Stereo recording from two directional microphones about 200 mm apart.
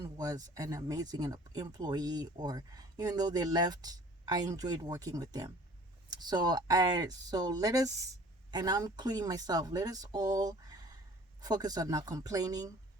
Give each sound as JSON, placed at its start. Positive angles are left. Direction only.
{"t": 0.0, "sound": "speech", "side_deg": -20}